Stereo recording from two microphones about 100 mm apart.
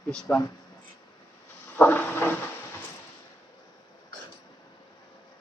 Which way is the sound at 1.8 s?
15° left (ahead or behind).